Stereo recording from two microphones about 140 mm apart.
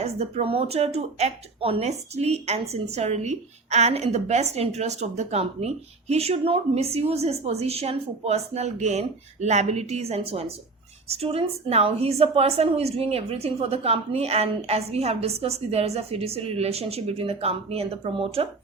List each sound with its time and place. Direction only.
0.0 s speech: 50° right (ahead or behind)